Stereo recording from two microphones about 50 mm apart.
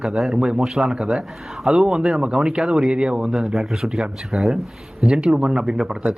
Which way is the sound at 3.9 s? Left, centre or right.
Centre.